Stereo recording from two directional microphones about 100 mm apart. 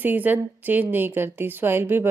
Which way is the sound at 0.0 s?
15° right (ahead or behind).